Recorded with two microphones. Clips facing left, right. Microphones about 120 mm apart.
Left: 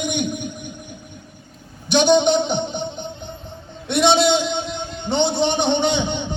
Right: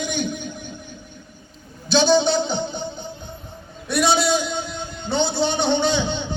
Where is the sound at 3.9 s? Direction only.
25° left (ahead or behind).